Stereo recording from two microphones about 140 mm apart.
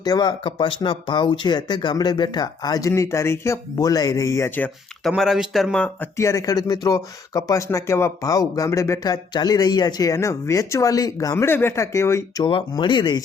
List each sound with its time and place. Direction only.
0.0 s speech: 30° left (ahead or behind)
5.0 s speech: centre (ahead or behind)
5.7 s speech: 10° left (ahead or behind)
6.1 s speech: 20° left (ahead or behind)
12.5 s speech: 35° left (ahead or behind)